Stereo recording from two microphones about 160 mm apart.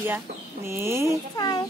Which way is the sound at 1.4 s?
25° left (ahead or behind).